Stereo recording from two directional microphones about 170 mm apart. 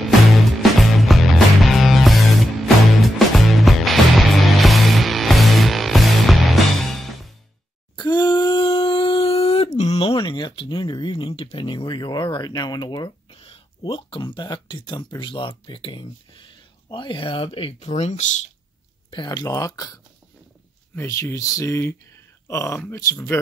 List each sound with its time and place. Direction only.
0.6 s music: centre (ahead or behind)
7.9 s a sound: 25° left (ahead or behind)
16.9 s speech: 30° left (ahead or behind)
19.0 s speech: 25° left (ahead or behind)
20.9 s speech: 15° left (ahead or behind)